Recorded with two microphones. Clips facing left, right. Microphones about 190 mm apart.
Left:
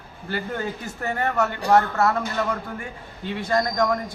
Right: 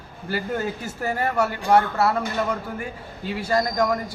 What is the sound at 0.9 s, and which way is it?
A man's voice, 10° right (ahead or behind).